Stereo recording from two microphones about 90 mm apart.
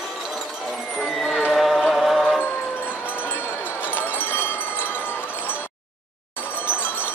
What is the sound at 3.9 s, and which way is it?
Wind chime, 25° left (ahead or behind).